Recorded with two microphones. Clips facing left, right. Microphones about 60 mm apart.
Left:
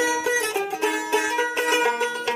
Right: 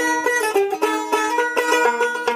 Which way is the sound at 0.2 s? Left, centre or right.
Right.